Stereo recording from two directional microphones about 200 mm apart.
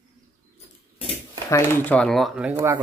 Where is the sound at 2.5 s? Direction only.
10° right (ahead or behind).